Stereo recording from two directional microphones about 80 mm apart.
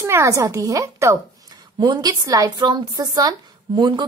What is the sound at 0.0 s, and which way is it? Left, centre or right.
Speech, right.